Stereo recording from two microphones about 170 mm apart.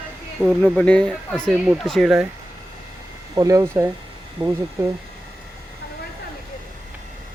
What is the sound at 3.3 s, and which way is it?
Speech, 20° right (ahead or behind).